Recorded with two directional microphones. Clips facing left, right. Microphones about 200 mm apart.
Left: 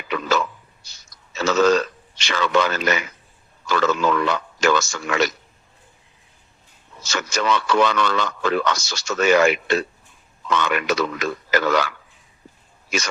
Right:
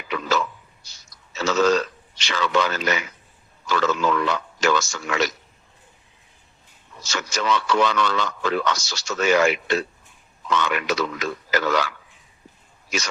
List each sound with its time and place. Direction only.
0.1 s a sound: 55° left (ahead or behind)
3.7 s a man's voice: 55° left (ahead or behind)
7.1 s a man's voice: 55° left (ahead or behind)